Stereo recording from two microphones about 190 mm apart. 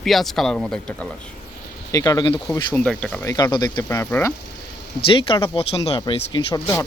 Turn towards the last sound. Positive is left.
turn(degrees=25)  # may be behind; listen again after turning